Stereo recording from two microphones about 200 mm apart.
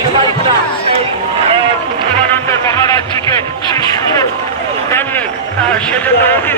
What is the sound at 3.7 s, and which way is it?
Speech, 20° left (ahead or behind).